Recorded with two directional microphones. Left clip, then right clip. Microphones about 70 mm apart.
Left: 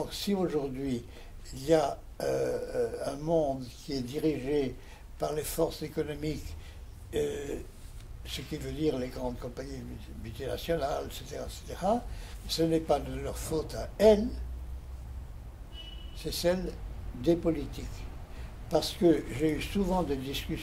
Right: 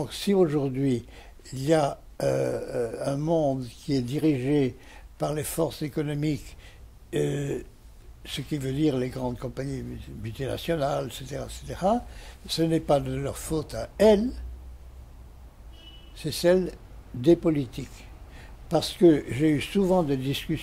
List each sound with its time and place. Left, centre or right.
0.0 s speech: right
16.2 s speech: right